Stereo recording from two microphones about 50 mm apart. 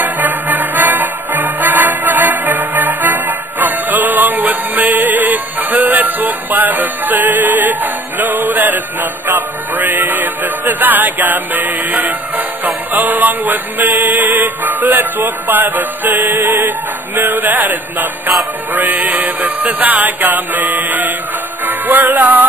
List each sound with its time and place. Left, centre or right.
0.0 s music: right